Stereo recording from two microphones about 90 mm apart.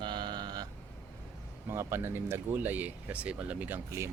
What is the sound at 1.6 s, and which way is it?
Speech, 30° right (ahead or behind).